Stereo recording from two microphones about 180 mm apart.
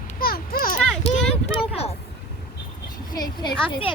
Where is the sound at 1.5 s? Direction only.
35° left (ahead or behind).